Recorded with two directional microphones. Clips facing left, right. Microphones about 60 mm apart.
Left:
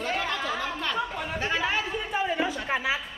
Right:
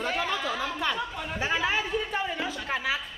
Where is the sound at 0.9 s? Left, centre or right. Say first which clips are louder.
Left 3 dB; centre.